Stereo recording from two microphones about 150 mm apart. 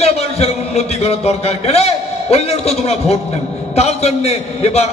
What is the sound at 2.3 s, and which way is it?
A man's voice, 45° left (ahead or behind).